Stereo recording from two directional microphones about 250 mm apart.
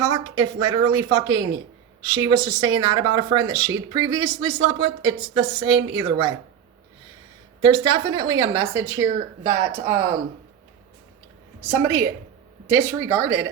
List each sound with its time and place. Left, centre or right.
0.0 s speech: centre
7.6 s speech: centre
11.7 s speech: centre